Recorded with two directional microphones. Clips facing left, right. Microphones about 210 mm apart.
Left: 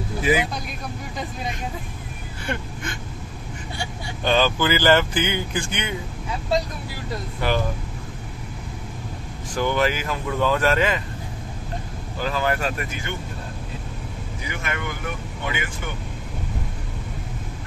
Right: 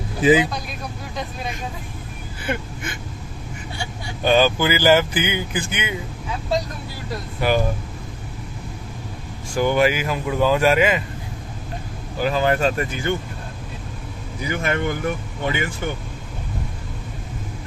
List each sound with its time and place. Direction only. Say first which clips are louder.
0.2 s speech: right 6 dB; 20° right (ahead or behind)
2.4 s speech: right 2 dB; 5° right (ahead or behind)
4.2 s speech: right 3 dB; 10° right (ahead or behind)
7.4 s speech: right 4 dB; 10° right (ahead or behind)
9.5 s speech: right 4 dB; 10° right (ahead or behind)
12.2 s speech: right 5 dB; 20° right (ahead or behind)
14.5 s speech: right 8 dB; 35° right (ahead or behind)